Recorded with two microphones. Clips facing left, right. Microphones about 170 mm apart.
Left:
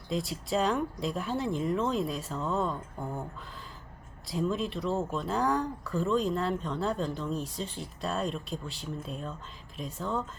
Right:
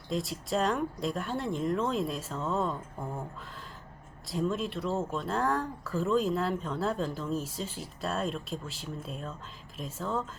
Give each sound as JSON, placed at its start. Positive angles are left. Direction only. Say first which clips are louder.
{"t": 0.1, "sound": "speech", "louder": "left 1 dB", "side_deg": 0}
{"t": 4.3, "sound": "speech", "louder": "even", "side_deg": 0}